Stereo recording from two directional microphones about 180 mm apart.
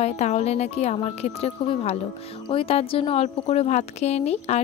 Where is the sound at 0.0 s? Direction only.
40° left (ahead or behind).